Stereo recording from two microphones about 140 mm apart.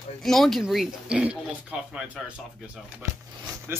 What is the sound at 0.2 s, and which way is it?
Speech, centre (ahead or behind).